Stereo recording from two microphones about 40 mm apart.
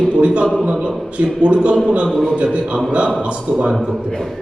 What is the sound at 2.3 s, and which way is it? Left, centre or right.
Speech, right.